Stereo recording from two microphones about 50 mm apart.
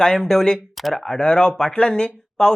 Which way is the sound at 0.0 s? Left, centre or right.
Centre.